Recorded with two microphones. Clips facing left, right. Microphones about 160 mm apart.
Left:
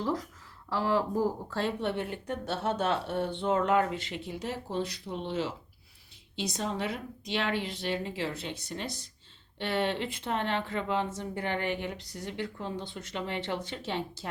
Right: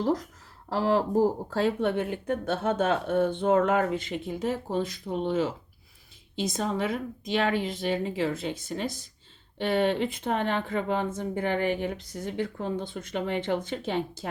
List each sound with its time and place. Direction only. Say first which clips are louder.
0.0 s speech: right 5 dB; 45° right (ahead or behind)